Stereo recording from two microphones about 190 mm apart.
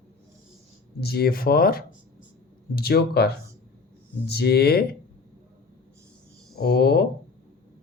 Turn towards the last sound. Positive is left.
turn(degrees=55)  # may be behind; listen again after turning